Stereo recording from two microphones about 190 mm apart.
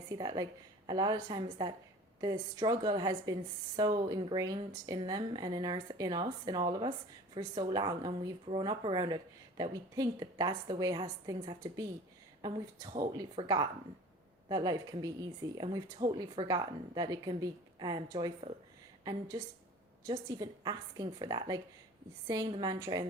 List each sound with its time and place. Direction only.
0.2 s speech: 20° right (ahead or behind)
20.1 s speech: 20° right (ahead or behind)